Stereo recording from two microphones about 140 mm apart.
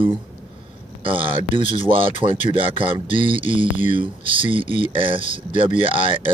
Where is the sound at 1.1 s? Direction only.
40° right (ahead or behind).